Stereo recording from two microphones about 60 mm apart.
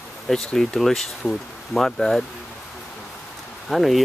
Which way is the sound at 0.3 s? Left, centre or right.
Centre.